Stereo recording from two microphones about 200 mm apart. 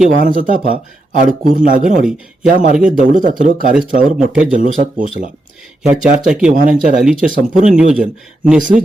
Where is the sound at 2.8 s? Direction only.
40° right (ahead or behind).